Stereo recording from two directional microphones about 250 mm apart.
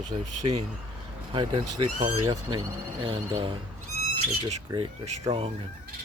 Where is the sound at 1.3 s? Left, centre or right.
Centre.